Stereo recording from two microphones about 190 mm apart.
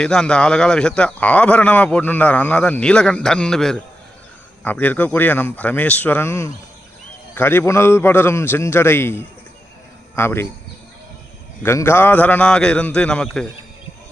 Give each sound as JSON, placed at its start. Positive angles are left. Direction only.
{"t": 0.0, "sound": "a man's voice", "side_deg": 5}
{"t": 11.6, "sound": "a man's voice", "side_deg": 15}